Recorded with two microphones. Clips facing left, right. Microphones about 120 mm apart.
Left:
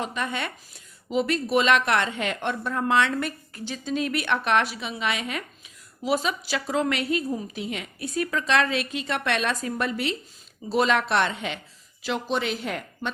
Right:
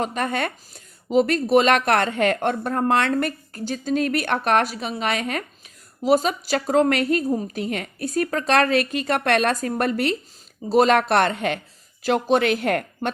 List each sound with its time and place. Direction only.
0.0 s speech: 45° right (ahead or behind)